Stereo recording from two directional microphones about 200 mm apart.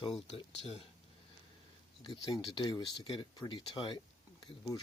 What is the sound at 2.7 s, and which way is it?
Speech, 20° left (ahead or behind).